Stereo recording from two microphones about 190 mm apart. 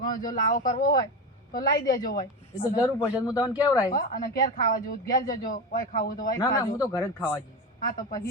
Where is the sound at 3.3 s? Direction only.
20° left (ahead or behind).